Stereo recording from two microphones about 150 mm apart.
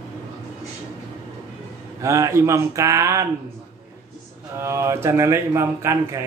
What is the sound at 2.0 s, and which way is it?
Speech, 20° right (ahead or behind).